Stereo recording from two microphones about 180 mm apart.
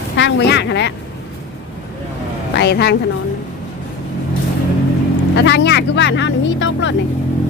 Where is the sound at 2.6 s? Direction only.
65° left (ahead or behind).